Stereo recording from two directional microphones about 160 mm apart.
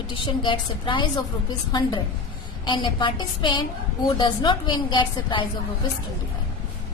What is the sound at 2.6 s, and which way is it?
A woman's voice, 30° left (ahead or behind).